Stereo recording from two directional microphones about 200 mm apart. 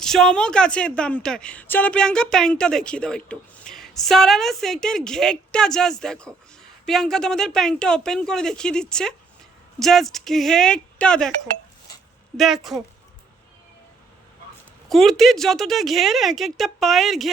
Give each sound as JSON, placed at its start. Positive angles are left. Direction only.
{"t": 0.0, "sound": "a woman's voice", "side_deg": 0}
{"t": 12.4, "sound": "a woman's voice", "side_deg": 0}
{"t": 14.8, "sound": "a woman's voice", "side_deg": 0}